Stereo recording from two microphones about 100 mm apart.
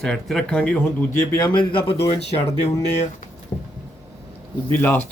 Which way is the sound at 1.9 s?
75° left (ahead or behind).